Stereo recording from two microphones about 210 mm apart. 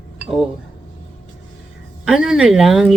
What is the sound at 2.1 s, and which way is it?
Speech, 5° right (ahead or behind).